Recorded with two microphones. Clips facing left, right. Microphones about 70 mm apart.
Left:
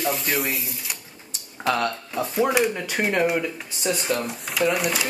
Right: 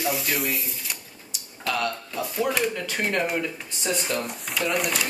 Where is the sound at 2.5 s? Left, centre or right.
Centre.